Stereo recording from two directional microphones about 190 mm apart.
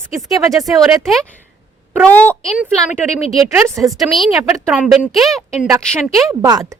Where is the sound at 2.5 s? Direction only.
5° right (ahead or behind).